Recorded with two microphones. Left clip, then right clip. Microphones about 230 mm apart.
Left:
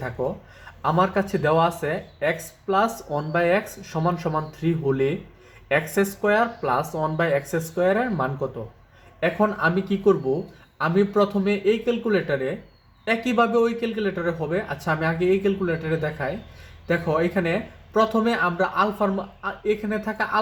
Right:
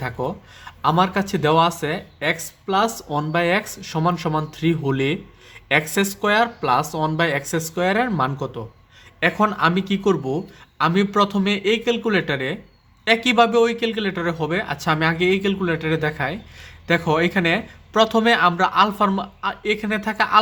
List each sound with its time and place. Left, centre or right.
0.8 s speech: right